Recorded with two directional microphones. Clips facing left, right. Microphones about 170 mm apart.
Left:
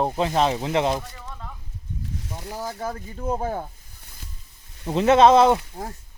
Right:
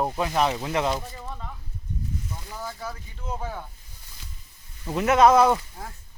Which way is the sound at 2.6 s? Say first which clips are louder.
Left 6 dB; 45° left (ahead or behind).